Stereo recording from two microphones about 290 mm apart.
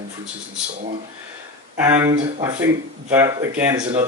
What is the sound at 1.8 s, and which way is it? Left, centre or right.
Speech, centre.